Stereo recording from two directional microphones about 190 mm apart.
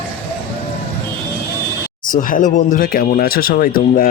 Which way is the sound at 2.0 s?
45° left (ahead or behind).